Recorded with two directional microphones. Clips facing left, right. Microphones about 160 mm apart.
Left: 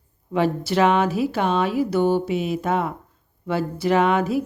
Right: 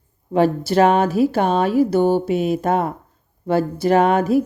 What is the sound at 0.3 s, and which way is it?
Speech, 45° right (ahead or behind).